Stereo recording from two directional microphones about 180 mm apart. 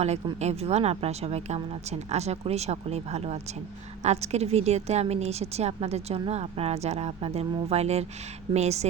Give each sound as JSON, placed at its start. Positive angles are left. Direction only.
{"t": 0.3, "sound": "a woman's voice", "side_deg": -40}